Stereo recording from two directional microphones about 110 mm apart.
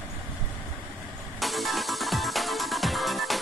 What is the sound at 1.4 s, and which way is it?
Music, centre (ahead or behind).